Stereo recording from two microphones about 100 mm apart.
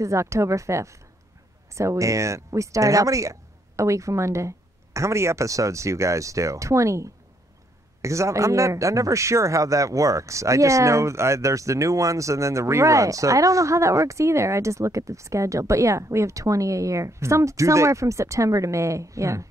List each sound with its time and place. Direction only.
0.0 s a man's voice: 30° right (ahead or behind)